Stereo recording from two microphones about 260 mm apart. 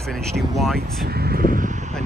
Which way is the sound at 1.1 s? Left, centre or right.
Right.